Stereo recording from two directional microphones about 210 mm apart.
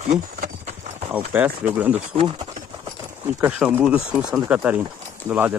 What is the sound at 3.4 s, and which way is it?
Speech, 5° right (ahead or behind).